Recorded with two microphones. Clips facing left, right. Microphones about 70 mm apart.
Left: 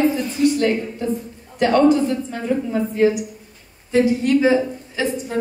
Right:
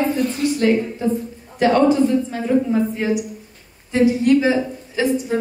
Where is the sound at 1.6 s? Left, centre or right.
Centre.